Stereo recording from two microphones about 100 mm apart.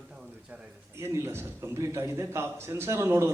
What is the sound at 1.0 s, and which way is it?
A man's voice, 25° right (ahead or behind).